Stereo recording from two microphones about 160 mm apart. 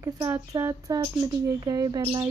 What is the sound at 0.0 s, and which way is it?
Speech, 20° right (ahead or behind).